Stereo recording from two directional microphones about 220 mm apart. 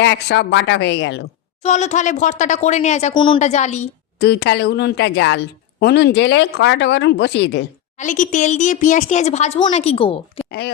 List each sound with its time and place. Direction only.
0.0 s a woman's voice: 50° left (ahead or behind)
1.6 s speech: 30° left (ahead or behind)
4.2 s a woman's voice: 50° left (ahead or behind)
7.9 s speech: 35° left (ahead or behind)
10.4 s a sound: 25° left (ahead or behind)